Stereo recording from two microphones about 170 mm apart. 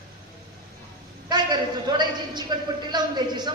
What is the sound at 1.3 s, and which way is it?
A man's voice, 25° right (ahead or behind).